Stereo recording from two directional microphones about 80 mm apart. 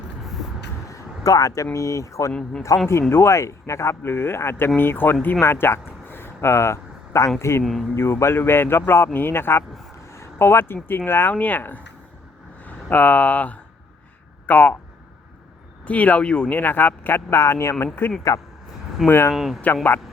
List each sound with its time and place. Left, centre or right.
0.9 s a sound: left
1.7 s speech: left
2.3 s speech: centre
3.1 s speech: left
7.6 s speech: centre
7.9 s speech: left
10.1 s a sound: left
10.8 s speech: left
15.8 s speech: centre
16.6 s speech: left
18.3 s speech: left
19.0 s speech: left
19.3 s speech: centre
19.6 s speech: left